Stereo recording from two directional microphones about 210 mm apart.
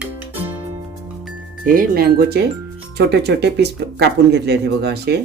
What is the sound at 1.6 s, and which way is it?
Speech, 45° right (ahead or behind).